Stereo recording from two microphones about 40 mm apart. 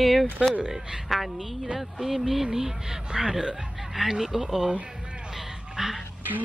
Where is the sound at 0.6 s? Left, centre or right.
Centre.